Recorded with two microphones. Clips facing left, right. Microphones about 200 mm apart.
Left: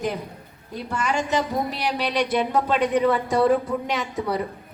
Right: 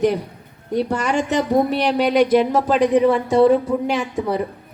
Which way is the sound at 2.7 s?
30° right (ahead or behind).